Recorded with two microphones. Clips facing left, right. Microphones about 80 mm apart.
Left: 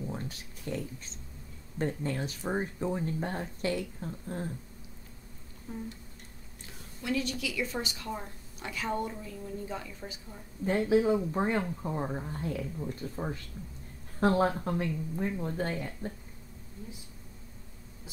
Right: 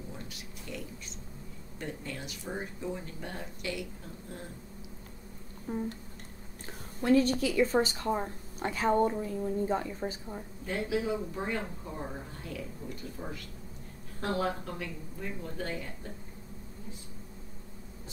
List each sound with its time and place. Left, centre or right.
0.1 s a sound: left
1.8 s speech: left
5.7 s a woman's voice: right
7.0 s a woman's voice: right
10.9 s speech: left